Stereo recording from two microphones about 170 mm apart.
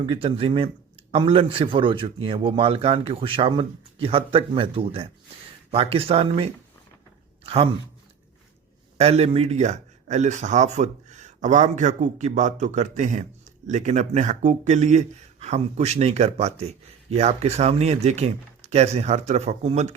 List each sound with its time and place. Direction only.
0.0 s a man's voice: 30° right (ahead or behind)
9.0 s a man's voice: 35° right (ahead or behind)